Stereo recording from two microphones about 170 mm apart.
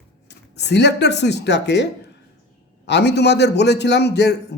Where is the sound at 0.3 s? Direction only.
90° left.